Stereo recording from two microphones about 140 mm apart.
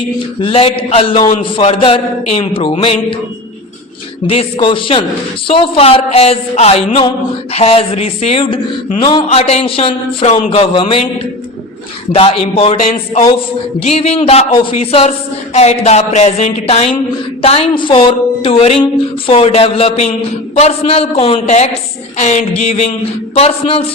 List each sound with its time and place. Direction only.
0.2 s speech: 40° left (ahead or behind)
4.3 s speech: 40° left (ahead or behind)
12.1 s speech: 45° left (ahead or behind)